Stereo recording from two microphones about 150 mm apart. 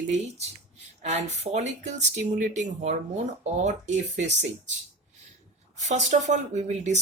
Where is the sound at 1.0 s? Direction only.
50° right (ahead or behind).